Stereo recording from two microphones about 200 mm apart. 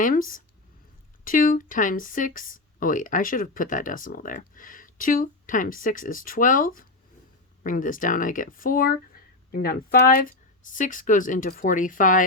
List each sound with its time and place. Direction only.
0.0 s speech: 45° left (ahead or behind)